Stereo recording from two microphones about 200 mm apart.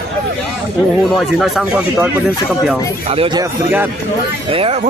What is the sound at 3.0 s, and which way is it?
Speech, 25° right (ahead or behind).